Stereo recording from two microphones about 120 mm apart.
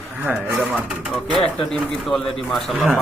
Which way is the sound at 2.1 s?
Centre (ahead or behind).